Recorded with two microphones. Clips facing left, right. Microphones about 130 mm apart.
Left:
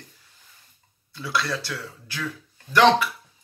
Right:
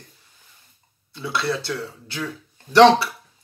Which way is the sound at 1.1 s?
25° right (ahead or behind).